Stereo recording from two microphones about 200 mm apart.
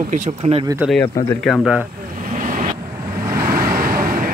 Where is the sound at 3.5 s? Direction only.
45° right (ahead or behind).